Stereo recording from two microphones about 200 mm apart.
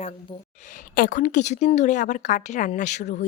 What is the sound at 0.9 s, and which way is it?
A woman's voice, 45° left (ahead or behind).